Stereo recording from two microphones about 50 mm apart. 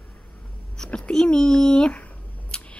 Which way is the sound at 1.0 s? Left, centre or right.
Centre.